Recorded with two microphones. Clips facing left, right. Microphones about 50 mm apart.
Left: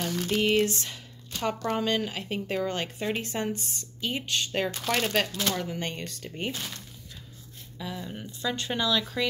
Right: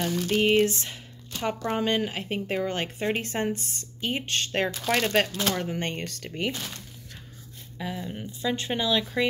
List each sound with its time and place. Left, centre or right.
0.4 s speech: right
1.7 s speech: right
4.8 s speech: centre
5.1 s speech: right
6.1 s speech: right
7.8 s speech: centre